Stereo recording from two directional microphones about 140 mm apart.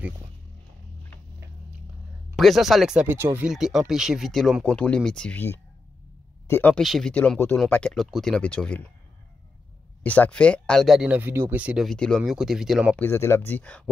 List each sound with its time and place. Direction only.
2.3 s speech: centre (ahead or behind); by 3.4 s 15° right (ahead or behind)
3.4 s speech: 5° right (ahead or behind); by 6.7 s 15° left (ahead or behind)
6.7 s speech: centre (ahead or behind)
10.0 s speech: 10° left (ahead or behind)
12.9 s speech: 15° left (ahead or behind)